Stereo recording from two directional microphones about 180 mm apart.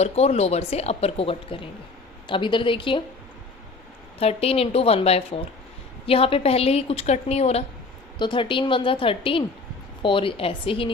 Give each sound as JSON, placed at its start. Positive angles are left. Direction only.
{"t": 0.0, "sound": "a woman's voice", "side_deg": 35}
{"t": 4.2, "sound": "a woman's voice", "side_deg": 35}